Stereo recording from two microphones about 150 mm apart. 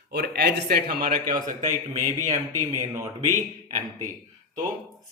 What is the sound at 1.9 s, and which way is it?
Speech, 50° right (ahead or behind).